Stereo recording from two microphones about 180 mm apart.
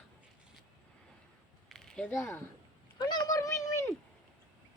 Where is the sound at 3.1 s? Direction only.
20° left (ahead or behind).